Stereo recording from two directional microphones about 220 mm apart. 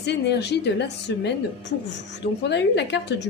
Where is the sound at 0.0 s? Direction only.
50° left (ahead or behind).